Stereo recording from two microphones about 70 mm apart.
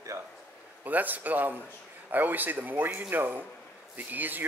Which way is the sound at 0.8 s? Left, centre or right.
Right.